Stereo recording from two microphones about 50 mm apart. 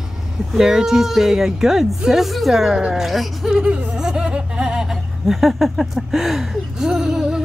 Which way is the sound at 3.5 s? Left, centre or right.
Right.